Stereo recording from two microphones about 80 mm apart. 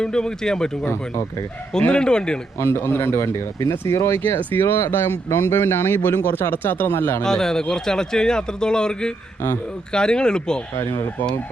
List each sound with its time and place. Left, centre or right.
0.0 s a man's voice: centre
2.6 s speech: left
7.2 s a man's voice: centre
10.8 s speech: left